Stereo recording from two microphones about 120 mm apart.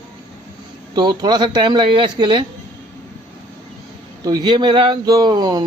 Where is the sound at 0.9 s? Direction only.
40° right (ahead or behind).